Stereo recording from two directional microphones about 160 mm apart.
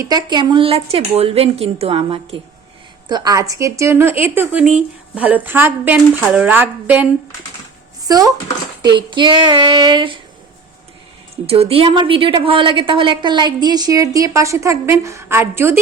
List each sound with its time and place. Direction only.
0.0 s a woman's voice: 25° right (ahead or behind)
3.1 s speech: 25° right (ahead or behind); by 7.1 s 10° right (ahead or behind)
8.0 s a woman's voice: 25° right (ahead or behind)
11.4 s a woman's voice: 40° right (ahead or behind); by 15.8 s 15° right (ahead or behind)